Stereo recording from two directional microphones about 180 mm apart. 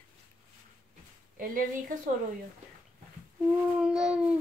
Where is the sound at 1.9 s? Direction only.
50° right (ahead or behind).